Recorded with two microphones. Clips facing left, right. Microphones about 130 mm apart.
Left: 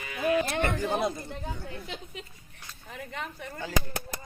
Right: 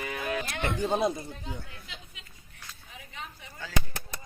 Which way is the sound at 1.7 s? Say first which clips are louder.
Left 9 dB; 35° left (ahead or behind).